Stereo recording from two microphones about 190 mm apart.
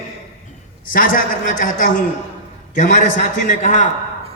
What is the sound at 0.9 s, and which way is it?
A man's voice, 45° left (ahead or behind).